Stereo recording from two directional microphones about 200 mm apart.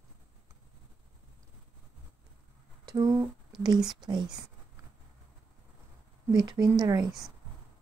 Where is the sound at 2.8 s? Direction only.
20° right (ahead or behind).